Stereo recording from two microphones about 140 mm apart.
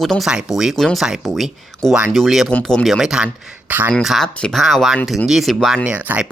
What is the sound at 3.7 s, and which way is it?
Speech, 15° right (ahead or behind).